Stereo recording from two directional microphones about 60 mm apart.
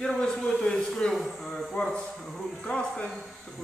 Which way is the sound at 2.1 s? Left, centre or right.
Centre.